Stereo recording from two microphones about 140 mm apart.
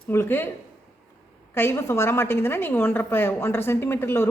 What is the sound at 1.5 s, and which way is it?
A woman's voice, 15° left (ahead or behind).